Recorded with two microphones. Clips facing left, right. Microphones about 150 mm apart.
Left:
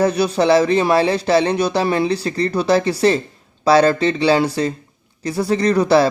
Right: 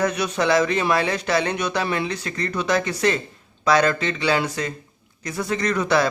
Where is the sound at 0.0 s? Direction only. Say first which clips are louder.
Left 6 dB; 30° left (ahead or behind).